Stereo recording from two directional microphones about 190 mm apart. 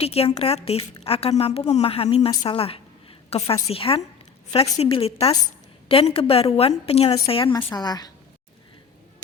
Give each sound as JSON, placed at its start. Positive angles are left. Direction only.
{"t": 0.0, "sound": "a woman's voice", "side_deg": 30}